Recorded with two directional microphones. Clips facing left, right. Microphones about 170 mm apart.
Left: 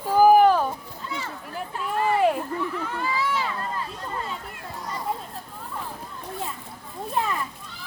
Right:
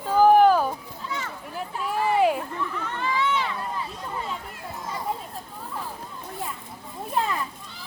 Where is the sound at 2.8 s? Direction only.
10° left (ahead or behind).